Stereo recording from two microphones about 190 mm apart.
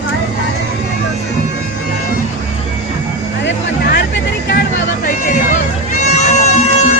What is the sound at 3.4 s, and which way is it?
Music, 60° left (ahead or behind).